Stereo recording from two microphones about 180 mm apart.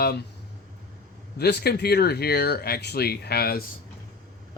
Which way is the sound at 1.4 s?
65° left (ahead or behind).